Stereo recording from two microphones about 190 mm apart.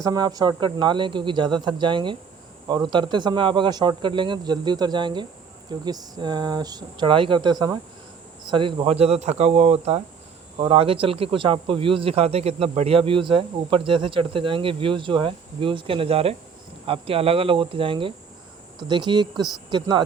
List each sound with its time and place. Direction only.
0.0 s speech: 20° right (ahead or behind)